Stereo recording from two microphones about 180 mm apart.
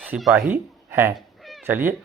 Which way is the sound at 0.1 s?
5° right (ahead or behind).